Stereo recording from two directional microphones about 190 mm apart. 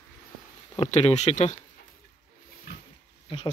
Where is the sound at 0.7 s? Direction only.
35° left (ahead or behind).